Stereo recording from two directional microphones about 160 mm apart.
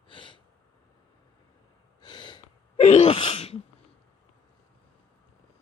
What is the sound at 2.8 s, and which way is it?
Sneeze, 40° left (ahead or behind).